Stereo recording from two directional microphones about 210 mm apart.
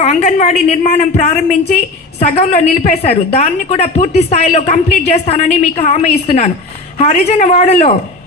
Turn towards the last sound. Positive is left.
turn(degrees=30)  # may be behind; listen again after turning